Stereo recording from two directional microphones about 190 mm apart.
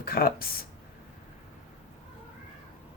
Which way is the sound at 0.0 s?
50° left (ahead or behind).